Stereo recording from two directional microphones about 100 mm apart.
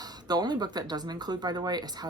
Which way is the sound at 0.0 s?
40° right (ahead or behind).